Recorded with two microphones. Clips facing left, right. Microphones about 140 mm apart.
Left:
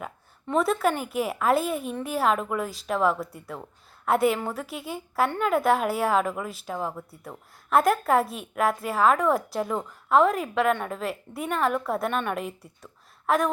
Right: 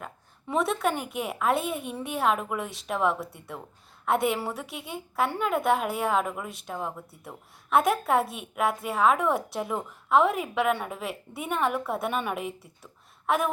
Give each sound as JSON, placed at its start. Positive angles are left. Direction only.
{"t": 0.4, "sound": "a woman's voice", "side_deg": 0}